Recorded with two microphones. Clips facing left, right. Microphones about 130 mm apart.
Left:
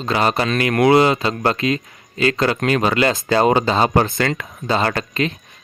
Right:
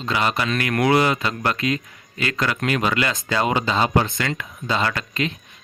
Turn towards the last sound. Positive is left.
turn(degrees=40)  # may be behind; listen again after turning